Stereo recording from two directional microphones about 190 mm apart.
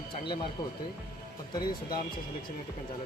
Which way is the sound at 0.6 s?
20° left (ahead or behind).